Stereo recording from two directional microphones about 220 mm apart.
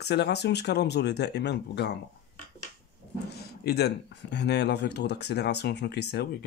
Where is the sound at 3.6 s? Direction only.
45° left (ahead or behind).